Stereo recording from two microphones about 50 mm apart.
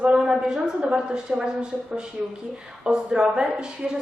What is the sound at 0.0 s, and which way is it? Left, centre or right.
A woman's voice, centre.